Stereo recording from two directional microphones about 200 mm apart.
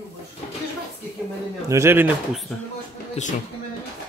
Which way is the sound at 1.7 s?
15° right (ahead or behind).